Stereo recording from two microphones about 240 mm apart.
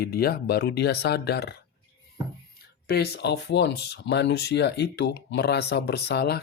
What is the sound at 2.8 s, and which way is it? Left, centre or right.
Speech, left.